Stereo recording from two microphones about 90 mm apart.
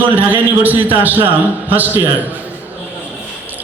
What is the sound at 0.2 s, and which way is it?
A man's voice, 20° right (ahead or behind).